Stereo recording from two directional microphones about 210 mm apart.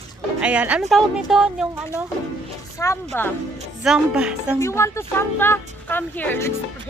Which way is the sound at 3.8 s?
5° right (ahead or behind).